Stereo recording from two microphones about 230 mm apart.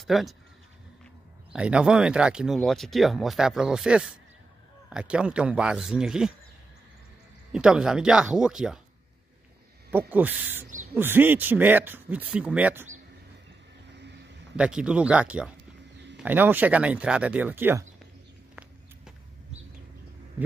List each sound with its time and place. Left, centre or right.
0.0 s speech: centre
1.5 s speech: centre
7.5 s speech: centre
9.8 s speech: centre
10.7 s a sound: right
11.0 s speech: centre
13.9 s vehicle: right
14.6 s speech: centre